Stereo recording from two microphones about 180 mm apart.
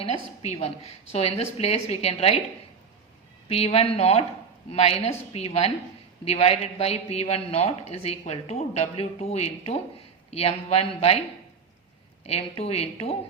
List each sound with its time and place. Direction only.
0.0 s a man's voice: 35° left (ahead or behind)
3.5 s a man's voice: 35° left (ahead or behind)
12.2 s a man's voice: 35° left (ahead or behind)